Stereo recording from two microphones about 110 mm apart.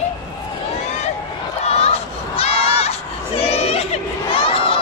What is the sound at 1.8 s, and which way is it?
Crowd, 70° left (ahead or behind).